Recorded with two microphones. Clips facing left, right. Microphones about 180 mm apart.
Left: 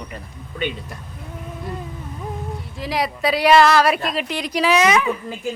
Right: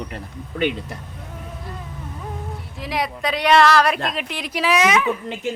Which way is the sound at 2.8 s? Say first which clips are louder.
Left 2 dB; centre (ahead or behind).